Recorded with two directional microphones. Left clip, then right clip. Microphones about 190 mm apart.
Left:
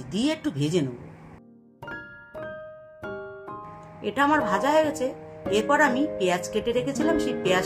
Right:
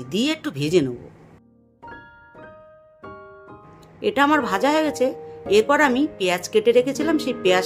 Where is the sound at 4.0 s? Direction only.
40° right (ahead or behind).